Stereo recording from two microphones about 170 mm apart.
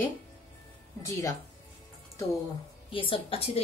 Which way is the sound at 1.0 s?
20° left (ahead or behind).